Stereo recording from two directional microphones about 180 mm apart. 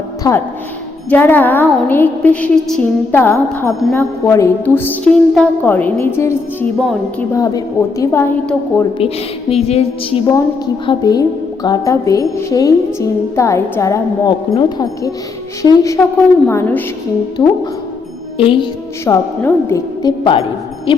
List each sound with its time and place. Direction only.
0.2 s a woman's voice: 20° left (ahead or behind)
6.7 s speech: centre (ahead or behind)
7.3 s a woman's voice: 20° left (ahead or behind)
9.0 s a woman's voice: 35° left (ahead or behind)
10.8 s a woman's voice: 20° left (ahead or behind)
17.4 s a woman's voice: 25° left (ahead or behind)
19.0 s a woman's voice: 15° left (ahead or behind)